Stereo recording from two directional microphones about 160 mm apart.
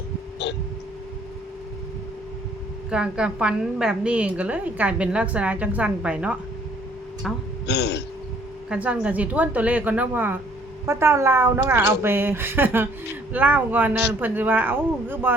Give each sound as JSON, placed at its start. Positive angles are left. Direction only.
{"t": 0.4, "sound": "hiccup", "side_deg": 90}
{"t": 2.9, "sound": "a woman's voice", "side_deg": -5}
{"t": 7.7, "sound": "throat clearing", "side_deg": 90}
{"t": 8.7, "sound": "a woman's voice", "side_deg": -5}